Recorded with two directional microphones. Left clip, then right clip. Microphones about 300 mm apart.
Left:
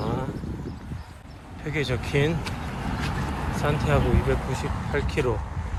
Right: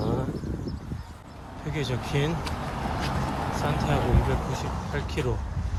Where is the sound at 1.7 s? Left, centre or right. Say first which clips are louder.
Left 4 dB; centre.